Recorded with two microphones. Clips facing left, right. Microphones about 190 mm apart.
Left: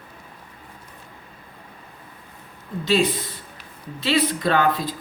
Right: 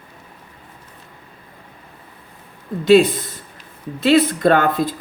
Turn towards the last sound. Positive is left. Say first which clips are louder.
# right 5 dB
turn(degrees=-50)  # may be behind; listen again after turning